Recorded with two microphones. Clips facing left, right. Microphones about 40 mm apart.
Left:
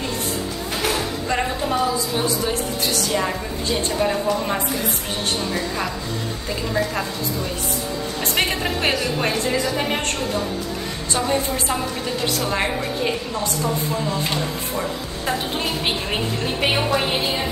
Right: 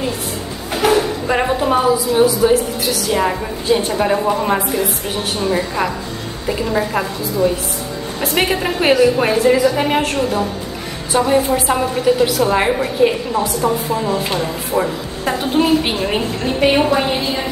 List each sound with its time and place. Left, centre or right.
0.8 s a sound: right
2.1 s a woman's voice: centre
3.1 s a woman's voice: centre
8.2 s a woman's voice: centre
13.6 s a woman's voice: right
14.0 s a woman's voice: centre
15.5 s a woman's voice: centre